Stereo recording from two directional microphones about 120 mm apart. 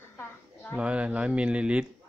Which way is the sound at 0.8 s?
10° right (ahead or behind).